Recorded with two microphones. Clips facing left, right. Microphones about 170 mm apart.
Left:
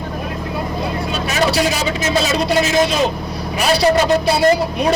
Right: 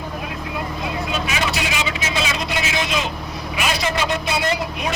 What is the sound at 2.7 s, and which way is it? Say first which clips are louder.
Speech: left 8 dB; 40° left (ahead or behind).